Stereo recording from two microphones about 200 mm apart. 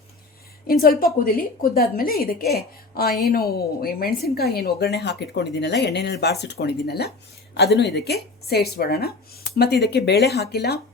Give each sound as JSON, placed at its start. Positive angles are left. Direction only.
{"t": 0.7, "sound": "a woman's voice", "side_deg": 45}